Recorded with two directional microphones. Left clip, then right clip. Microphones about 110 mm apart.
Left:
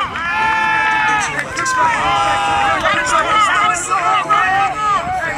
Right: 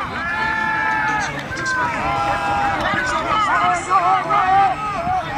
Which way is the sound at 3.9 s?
25° left (ahead or behind).